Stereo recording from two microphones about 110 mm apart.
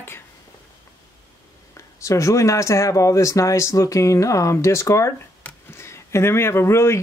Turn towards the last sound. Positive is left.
turn(degrees=25)  # may be behind; listen again after turning